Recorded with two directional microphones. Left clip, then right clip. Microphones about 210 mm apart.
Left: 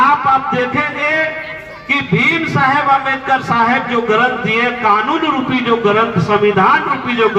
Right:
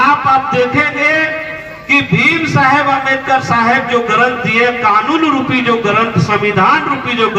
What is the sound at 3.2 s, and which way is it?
A man's voice, 45° right (ahead or behind).